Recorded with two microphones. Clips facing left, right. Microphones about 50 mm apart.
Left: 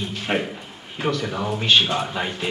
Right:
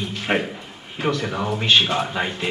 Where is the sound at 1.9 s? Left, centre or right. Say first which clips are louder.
Right 2 dB; centre.